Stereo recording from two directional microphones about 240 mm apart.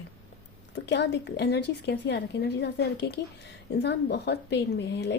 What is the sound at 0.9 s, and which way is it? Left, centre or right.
A woman's voice, left.